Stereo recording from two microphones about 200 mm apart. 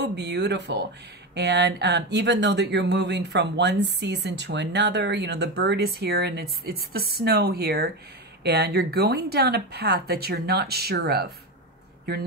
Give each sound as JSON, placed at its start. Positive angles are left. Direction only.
{"t": 0.0, "sound": "speech", "side_deg": -60}